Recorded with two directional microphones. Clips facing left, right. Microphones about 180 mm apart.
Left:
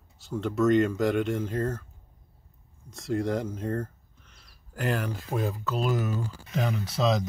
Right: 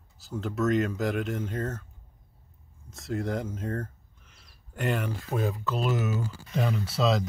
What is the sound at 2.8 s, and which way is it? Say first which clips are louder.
Speech: left 3 dB; centre (ahead or behind).